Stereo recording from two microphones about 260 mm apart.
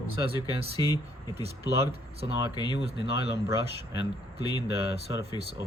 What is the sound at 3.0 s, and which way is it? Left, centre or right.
Speech, left.